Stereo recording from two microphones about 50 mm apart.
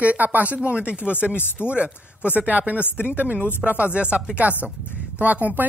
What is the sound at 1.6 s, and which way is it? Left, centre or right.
Speech, right.